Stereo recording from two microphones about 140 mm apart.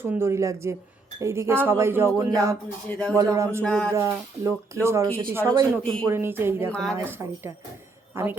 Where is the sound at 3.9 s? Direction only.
20° right (ahead or behind).